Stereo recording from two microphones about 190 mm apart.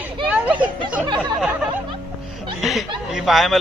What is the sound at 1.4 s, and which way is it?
Speech, 5° right (ahead or behind).